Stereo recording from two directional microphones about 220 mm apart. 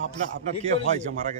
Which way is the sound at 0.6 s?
30° right (ahead or behind).